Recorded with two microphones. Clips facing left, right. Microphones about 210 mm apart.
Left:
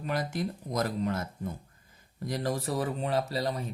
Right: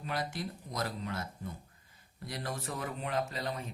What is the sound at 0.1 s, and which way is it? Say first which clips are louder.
A woman's voice: left 5 dB; 45° left (ahead or behind).